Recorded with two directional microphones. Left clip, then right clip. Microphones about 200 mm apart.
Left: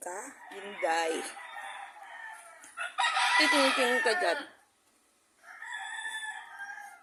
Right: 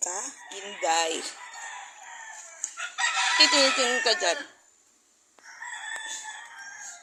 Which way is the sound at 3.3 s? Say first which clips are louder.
Right 6 dB; 15° left (ahead or behind).